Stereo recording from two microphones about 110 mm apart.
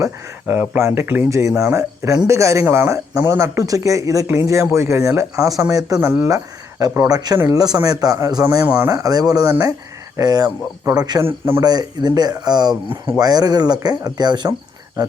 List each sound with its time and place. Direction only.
0.4 s speech: 20° right (ahead or behind)
6.1 s speech: 20° right (ahead or behind)
7.3 s speech: 20° right (ahead or behind)
7.6 s speech: 35° right (ahead or behind)
8.6 s speech: 15° right (ahead or behind)
8.9 s speech: 35° right (ahead or behind)